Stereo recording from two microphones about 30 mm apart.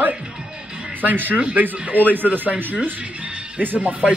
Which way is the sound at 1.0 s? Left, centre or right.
Right.